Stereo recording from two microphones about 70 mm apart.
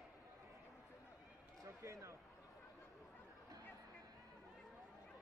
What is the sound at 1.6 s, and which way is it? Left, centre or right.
Basketball bounce, right.